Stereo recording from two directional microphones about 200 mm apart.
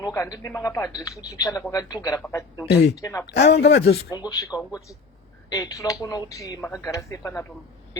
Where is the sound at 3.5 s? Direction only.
55° left (ahead or behind).